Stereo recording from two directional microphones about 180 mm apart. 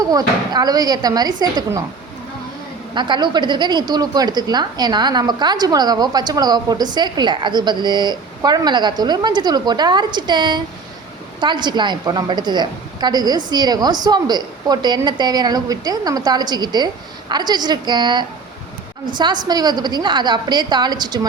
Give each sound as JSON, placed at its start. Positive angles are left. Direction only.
{"t": 0.0, "sound": "a woman's voice", "side_deg": -20}
{"t": 2.9, "sound": "a woman's voice", "side_deg": -25}